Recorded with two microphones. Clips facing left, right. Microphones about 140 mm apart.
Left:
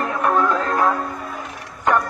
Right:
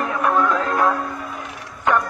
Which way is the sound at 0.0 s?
Centre (ahead or behind).